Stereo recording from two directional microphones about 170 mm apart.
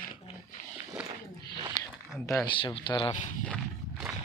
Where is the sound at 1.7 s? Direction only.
20° left (ahead or behind).